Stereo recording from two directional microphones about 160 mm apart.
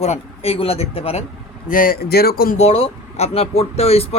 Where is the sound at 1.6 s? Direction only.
60° left (ahead or behind).